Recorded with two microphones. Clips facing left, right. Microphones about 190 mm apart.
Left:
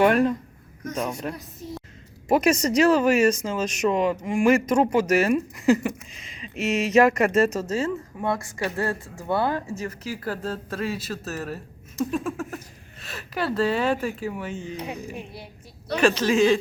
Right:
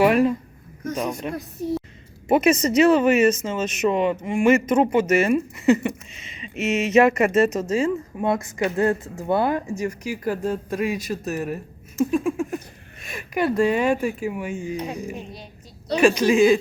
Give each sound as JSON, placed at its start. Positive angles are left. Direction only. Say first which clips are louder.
{"t": 0.0, "sound": "speech", "louder": "right 2 dB", "side_deg": -5}
{"t": 1.3, "sound": "a woman's voice", "louder": "right 7 dB", "side_deg": -60}
{"t": 2.2, "sound": "speech", "louder": "right 2 dB", "side_deg": -5}
{"t": 15.9, "sound": "speech", "louder": "right 3 dB", "side_deg": -10}